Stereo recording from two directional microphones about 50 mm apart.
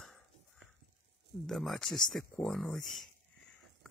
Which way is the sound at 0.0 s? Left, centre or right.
Centre.